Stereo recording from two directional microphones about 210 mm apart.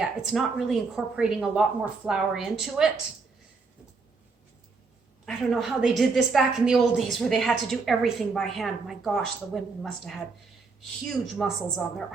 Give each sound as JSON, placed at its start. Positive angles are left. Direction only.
{"t": 0.0, "sound": "a woman's voice", "side_deg": 0}
{"t": 5.2, "sound": "a woman's voice", "side_deg": 0}